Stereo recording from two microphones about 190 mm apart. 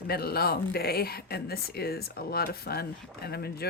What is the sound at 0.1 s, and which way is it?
Speech, 55° left (ahead or behind).